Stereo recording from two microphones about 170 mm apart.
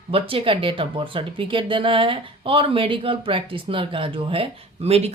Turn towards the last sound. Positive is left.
turn(degrees=-35)  # may be behind; listen again after turning